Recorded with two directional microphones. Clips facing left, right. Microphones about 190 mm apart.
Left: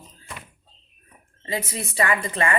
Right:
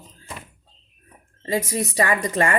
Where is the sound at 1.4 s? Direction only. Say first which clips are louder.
Right 6 dB; 45° right (ahead or behind).